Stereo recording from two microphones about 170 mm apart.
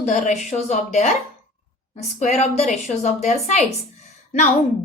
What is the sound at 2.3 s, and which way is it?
A woman's voice, 40° left (ahead or behind).